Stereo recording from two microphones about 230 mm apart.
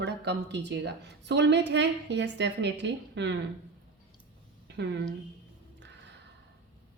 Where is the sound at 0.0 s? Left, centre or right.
Right.